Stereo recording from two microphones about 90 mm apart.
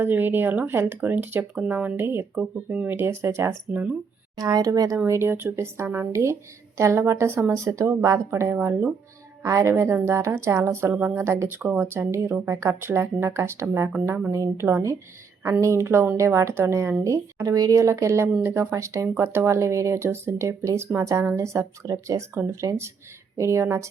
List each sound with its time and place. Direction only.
0.0 s speech: 20° right (ahead or behind)
3.7 s speech: 15° right (ahead or behind)
4.4 s speech: 45° right (ahead or behind)
5.0 s speech: 30° right (ahead or behind)
8.5 s speech: 20° right (ahead or behind)
9.4 s speech: 40° right (ahead or behind)